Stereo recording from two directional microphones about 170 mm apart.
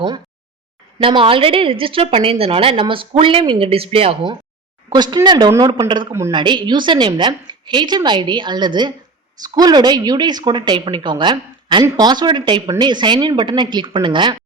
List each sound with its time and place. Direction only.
1.0 s a woman's voice: 30° right (ahead or behind)